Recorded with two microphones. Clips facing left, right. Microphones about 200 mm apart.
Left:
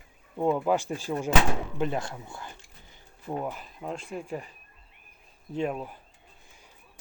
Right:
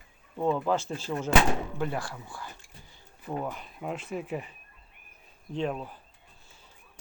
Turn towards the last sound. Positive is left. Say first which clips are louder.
# left 1 dB
turn(degrees=10)  # may be behind; listen again after turning